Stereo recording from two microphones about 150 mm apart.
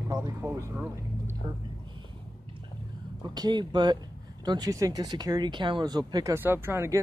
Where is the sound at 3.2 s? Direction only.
30° right (ahead or behind).